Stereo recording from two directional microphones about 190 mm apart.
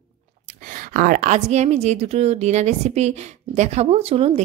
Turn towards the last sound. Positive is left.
turn(degrees=-35)  # may be behind; listen again after turning